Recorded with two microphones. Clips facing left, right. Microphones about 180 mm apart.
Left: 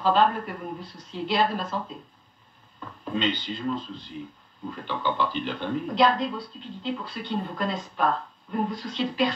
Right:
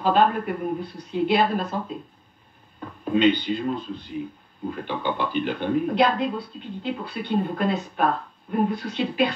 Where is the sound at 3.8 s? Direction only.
10° right (ahead or behind).